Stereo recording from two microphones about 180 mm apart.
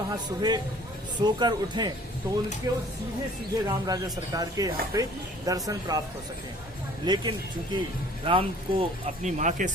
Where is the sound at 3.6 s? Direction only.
20° right (ahead or behind).